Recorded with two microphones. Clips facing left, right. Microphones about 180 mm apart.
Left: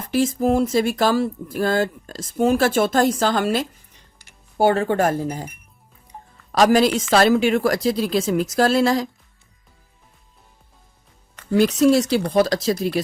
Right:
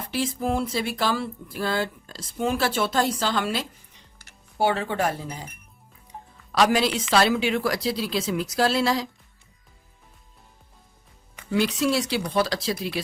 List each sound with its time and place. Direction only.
0.1 s speech: 45° left (ahead or behind)
6.5 s speech: 45° left (ahead or behind)
11.5 s speech: 45° left (ahead or behind)